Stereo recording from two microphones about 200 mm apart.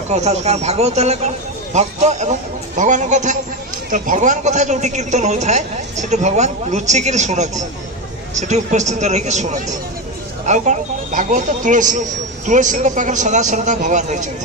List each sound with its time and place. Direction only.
0.1 s a man's voice: 35° right (ahead or behind)